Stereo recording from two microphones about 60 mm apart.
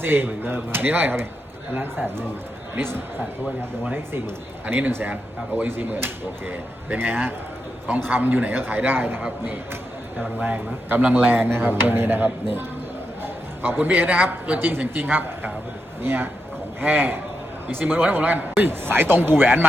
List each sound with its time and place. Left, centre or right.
0.0 s speech: right
5.6 s speech: right
10.4 s a man's voice: right